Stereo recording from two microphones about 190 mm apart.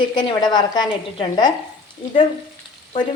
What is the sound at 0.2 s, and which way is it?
A woman's voice, 20° left (ahead or behind).